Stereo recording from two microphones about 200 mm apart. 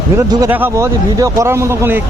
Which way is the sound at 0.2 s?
15° right (ahead or behind).